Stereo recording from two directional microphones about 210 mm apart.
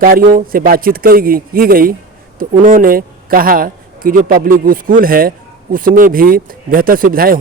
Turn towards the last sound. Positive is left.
turn(degrees=-45)  # may be behind; listen again after turning